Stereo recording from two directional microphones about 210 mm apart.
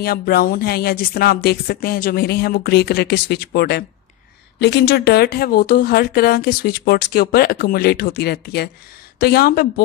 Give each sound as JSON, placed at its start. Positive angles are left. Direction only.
{"t": 0.0, "sound": "speech", "side_deg": 45}